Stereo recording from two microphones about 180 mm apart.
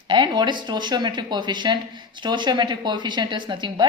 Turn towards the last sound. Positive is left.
turn(degrees=-25)  # may be behind; listen again after turning